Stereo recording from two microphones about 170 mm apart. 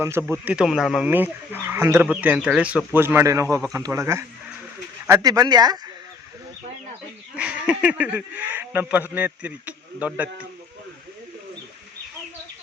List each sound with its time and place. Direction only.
0.0 s speech: 15° right (ahead or behind)
7.3 s speech: 5° right (ahead or behind)